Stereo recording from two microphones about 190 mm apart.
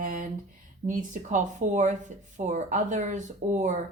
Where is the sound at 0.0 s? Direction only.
45° right (ahead or behind).